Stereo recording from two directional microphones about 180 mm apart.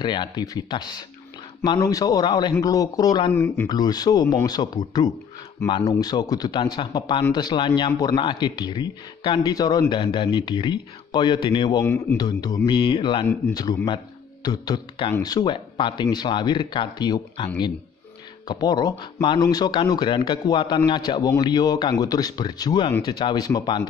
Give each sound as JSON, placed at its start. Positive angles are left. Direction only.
{"t": 0.0, "sound": "a man's voice", "side_deg": 25}
{"t": 3.3, "sound": "speech", "side_deg": 10}
{"t": 3.6, "sound": "a man's voice", "side_deg": 20}
{"t": 11.8, "sound": "speech", "side_deg": 10}
{"t": 12.2, "sound": "a man's voice", "side_deg": 20}
{"t": 18.5, "sound": "a man's voice", "side_deg": 20}